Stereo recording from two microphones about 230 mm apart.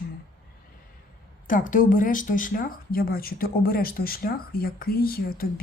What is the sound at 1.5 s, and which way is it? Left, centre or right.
Speech, left.